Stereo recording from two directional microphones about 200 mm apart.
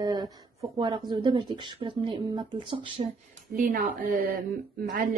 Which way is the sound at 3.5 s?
45° right (ahead or behind).